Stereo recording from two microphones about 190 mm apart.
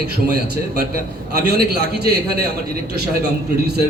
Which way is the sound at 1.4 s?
55° right (ahead or behind).